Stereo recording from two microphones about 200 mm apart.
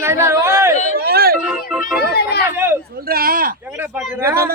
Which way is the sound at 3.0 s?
50° right (ahead or behind).